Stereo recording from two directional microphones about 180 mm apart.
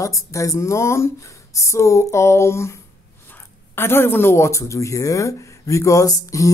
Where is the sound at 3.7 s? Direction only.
15° left (ahead or behind).